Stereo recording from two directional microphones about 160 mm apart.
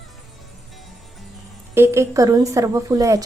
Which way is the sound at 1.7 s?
15° right (ahead or behind).